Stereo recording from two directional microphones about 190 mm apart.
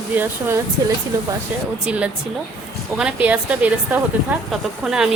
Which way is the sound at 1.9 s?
5° right (ahead or behind).